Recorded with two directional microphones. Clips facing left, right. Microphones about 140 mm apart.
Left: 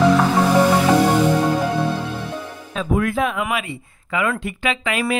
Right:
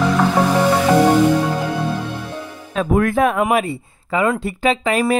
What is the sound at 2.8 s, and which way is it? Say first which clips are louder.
Speech: right 4 dB; 50° right (ahead or behind).